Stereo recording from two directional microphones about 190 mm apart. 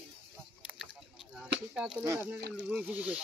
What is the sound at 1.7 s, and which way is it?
Speech, 10° right (ahead or behind).